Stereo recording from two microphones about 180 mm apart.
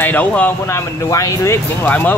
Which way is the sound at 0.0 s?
10° left (ahead or behind).